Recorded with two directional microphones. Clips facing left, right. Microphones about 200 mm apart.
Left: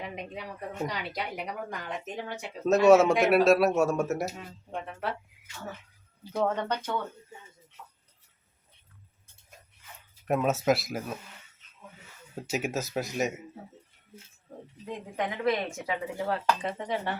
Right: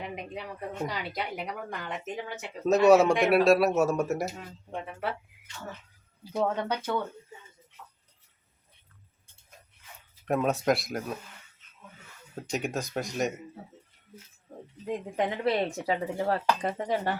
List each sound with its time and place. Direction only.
0.2 s speech: centre (ahead or behind)
6.3 s speech: 5° right (ahead or behind)
10.2 s speech: 5° left (ahead or behind)
12.4 s speech: 5° left (ahead or behind)
15.1 s speech: 30° right (ahead or behind)